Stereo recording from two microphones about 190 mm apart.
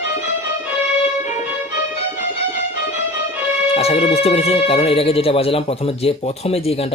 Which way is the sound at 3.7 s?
30° left (ahead or behind).